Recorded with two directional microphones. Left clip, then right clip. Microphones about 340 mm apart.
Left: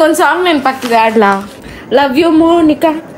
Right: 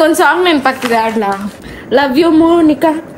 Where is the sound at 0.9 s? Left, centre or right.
Centre.